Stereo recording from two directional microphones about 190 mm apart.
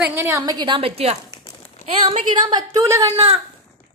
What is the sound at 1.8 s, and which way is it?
A woman's voice, 30° right (ahead or behind).